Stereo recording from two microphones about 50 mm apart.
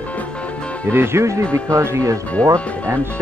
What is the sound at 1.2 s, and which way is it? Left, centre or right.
Speech, right.